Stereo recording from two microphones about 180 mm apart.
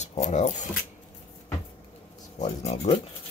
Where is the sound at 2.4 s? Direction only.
35° left (ahead or behind).